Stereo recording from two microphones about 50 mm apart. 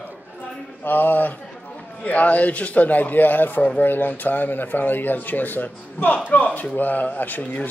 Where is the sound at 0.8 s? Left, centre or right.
Left.